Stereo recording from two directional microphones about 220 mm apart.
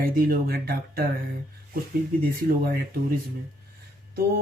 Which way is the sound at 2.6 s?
45° right (ahead or behind).